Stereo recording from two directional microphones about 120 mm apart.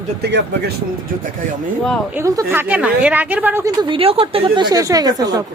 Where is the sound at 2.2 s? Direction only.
25° right (ahead or behind).